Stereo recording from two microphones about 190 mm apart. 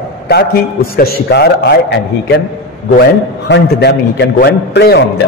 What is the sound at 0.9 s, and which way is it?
A man's voice, 55° left (ahead or behind).